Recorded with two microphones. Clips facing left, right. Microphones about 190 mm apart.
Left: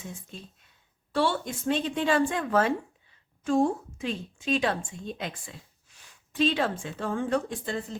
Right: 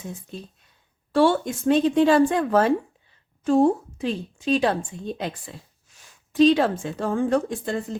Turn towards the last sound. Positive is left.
turn(degrees=-45)  # may be behind; listen again after turning